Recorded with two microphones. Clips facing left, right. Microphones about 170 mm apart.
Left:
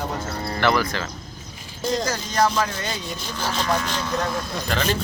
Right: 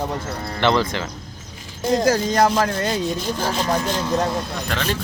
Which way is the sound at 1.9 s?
55° right (ahead or behind).